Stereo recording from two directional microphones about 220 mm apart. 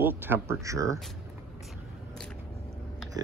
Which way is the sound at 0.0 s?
10° right (ahead or behind).